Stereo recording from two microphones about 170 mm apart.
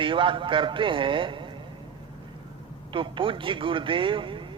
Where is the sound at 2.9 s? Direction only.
30° right (ahead or behind).